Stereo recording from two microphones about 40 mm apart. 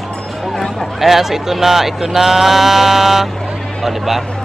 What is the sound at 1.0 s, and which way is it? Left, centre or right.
Speech, centre.